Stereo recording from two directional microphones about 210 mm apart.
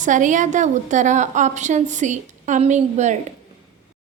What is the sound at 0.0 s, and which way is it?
A woman's voice, 35° right (ahead or behind).